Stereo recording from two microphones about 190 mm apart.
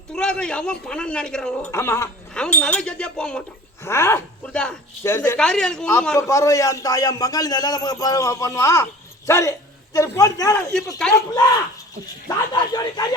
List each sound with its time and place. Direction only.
0.1 s a man's voice: 5° left (ahead or behind)
10.9 s a man's voice: 5° left (ahead or behind)
12.7 s speech: 20° left (ahead or behind)